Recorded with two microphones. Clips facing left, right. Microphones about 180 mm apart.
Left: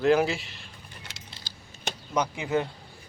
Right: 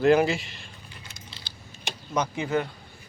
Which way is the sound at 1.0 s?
90° left.